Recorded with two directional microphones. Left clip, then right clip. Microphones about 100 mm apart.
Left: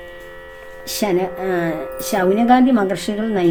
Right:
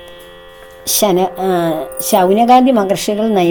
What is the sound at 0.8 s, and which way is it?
Speech, 90° right.